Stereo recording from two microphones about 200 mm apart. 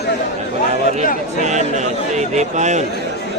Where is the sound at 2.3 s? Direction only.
35° right (ahead or behind).